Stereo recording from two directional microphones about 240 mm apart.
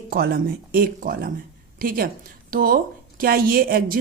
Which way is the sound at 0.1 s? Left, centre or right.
Right.